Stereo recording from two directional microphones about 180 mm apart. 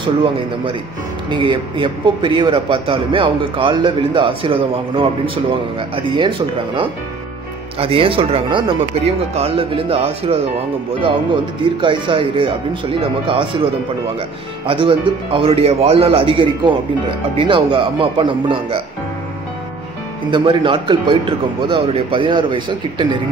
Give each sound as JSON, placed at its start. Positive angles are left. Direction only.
{"t": 0.0, "sound": "a man's voice", "side_deg": -30}
{"t": 11.8, "sound": "a man's voice", "side_deg": -25}
{"t": 14.7, "sound": "a man's voice", "side_deg": -30}
{"t": 20.2, "sound": "a man's voice", "side_deg": -25}